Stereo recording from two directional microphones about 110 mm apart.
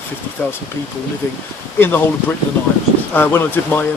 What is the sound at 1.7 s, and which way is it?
Speech, 20° left (ahead or behind).